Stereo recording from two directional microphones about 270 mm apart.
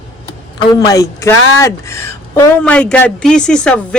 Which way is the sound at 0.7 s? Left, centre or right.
Centre.